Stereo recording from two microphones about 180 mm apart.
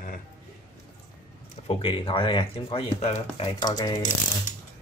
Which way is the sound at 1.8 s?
30° left (ahead or behind).